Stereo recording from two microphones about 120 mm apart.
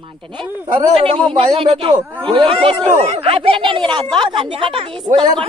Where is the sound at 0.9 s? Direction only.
50° right (ahead or behind).